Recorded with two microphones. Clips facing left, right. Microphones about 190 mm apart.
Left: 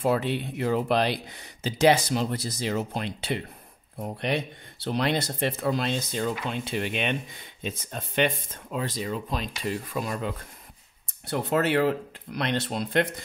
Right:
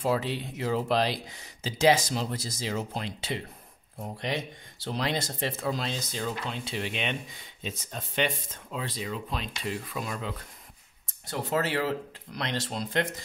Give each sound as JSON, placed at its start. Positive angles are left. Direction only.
{"t": 0.0, "sound": "speech", "side_deg": 60}
{"t": 8.7, "sound": "speech", "side_deg": 45}
{"t": 11.2, "sound": "speech", "side_deg": 60}